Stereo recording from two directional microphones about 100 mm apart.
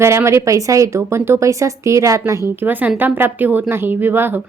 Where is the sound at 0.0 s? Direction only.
30° right (ahead or behind).